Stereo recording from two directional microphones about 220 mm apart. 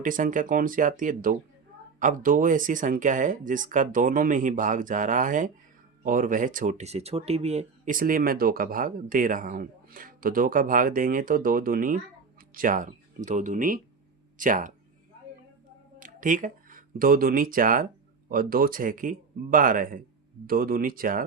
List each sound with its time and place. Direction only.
0.0 s speech: 35° right (ahead or behind)
16.0 s speech: 35° right (ahead or behind)